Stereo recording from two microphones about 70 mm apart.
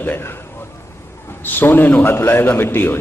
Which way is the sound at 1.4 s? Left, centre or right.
Left.